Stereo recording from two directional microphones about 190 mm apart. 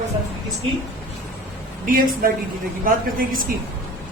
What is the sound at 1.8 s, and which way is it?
A woman's voice, 50° right (ahead or behind).